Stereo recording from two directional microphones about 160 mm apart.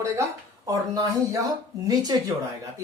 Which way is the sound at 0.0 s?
20° right (ahead or behind).